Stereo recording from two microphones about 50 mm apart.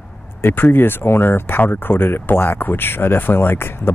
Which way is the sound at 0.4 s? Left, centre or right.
Left.